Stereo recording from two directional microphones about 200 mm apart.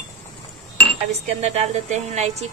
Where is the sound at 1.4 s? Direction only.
35° right (ahead or behind).